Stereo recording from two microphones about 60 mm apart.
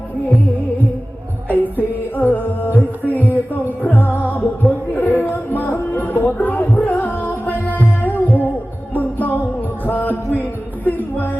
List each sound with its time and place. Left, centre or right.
1.5 s music: left